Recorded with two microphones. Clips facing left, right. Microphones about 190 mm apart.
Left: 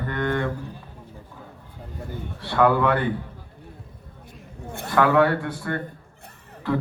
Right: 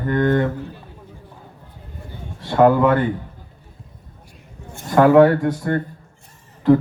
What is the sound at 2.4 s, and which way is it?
Speech, 45° right (ahead or behind).